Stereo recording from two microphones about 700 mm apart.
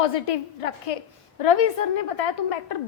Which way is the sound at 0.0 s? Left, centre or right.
Left.